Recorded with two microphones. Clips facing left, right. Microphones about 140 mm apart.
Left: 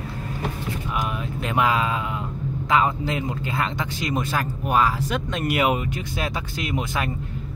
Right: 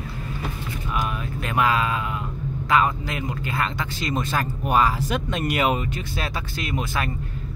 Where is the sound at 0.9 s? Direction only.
20° left (ahead or behind).